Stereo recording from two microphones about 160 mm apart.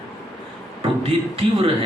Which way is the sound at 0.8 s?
35° right (ahead or behind).